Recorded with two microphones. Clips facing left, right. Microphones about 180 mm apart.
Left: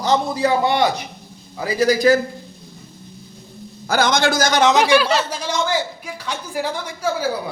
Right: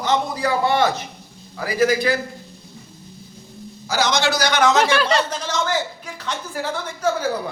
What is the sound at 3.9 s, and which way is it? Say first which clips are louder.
Speech: left 3 dB; 50° left (ahead or behind).